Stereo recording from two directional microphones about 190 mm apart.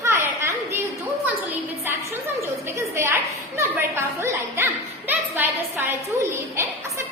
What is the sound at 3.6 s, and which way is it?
A woman's voice, 15° right (ahead or behind).